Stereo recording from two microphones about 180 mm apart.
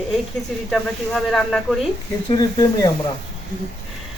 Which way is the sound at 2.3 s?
20° left (ahead or behind).